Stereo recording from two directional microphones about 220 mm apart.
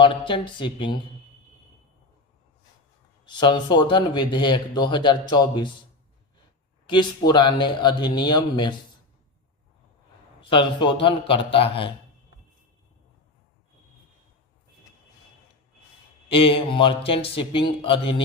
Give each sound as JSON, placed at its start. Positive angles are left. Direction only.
{"t": 0.0, "sound": "speech", "side_deg": 20}
{"t": 3.2, "sound": "speech", "side_deg": 20}
{"t": 6.8, "sound": "speech", "side_deg": 20}
{"t": 10.5, "sound": "speech", "side_deg": 20}
{"t": 16.3, "sound": "speech", "side_deg": 25}